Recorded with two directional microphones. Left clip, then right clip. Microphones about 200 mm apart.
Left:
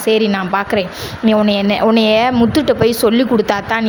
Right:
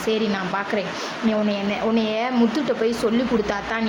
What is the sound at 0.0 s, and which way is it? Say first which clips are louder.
A woman's voice: left 8 dB; 40° left (ahead or behind).